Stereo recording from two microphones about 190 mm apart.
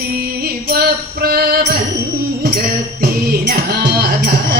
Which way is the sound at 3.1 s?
55° right (ahead or behind).